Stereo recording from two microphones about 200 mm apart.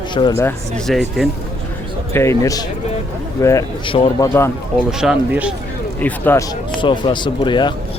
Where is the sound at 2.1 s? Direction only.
15° left (ahead or behind).